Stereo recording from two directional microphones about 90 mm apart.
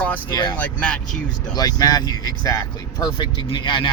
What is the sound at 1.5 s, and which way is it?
Speech, 45° left (ahead or behind).